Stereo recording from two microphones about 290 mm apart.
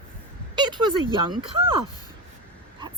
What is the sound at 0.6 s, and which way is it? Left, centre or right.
Speech, centre.